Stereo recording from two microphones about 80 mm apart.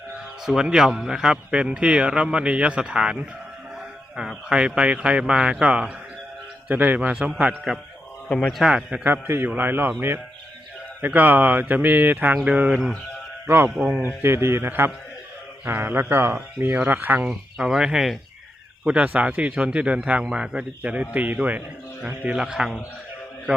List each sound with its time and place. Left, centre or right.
0.4 s a man's voice: centre
7.7 s a man's voice: centre
8.3 s speech: centre
8.6 s a man's voice: centre
9.2 s speech: right
11.0 s a man's voice: right
13.5 s speech: right
14.0 s speech: right
17.2 s speech: centre
18.9 s a man's voice: centre